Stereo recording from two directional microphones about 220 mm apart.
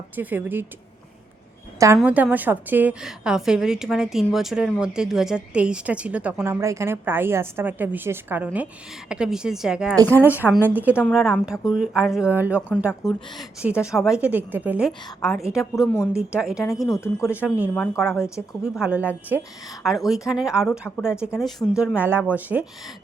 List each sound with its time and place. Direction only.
0.2 s a woman's voice: 10° right (ahead or behind)
2.0 s a woman's voice: 5° right (ahead or behind)
16.1 s a woman's voice: 5° right (ahead or behind)
16.9 s speech: 10° left (ahead or behind)
17.3 s a woman's voice: 5° right (ahead or behind)
21.6 s speech: 10° left (ahead or behind)
21.9 s a woman's voice: 10° right (ahead or behind)